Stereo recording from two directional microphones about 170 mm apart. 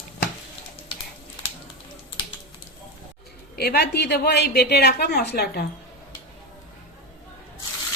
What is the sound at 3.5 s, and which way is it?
A woman's voice, 70° left (ahead or behind).